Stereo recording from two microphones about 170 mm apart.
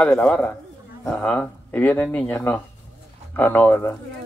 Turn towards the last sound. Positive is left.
turn(degrees=10)  # may be behind; listen again after turning